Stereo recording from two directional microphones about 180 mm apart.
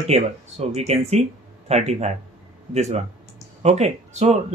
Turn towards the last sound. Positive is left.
turn(degrees=-35)  # may be behind; listen again after turning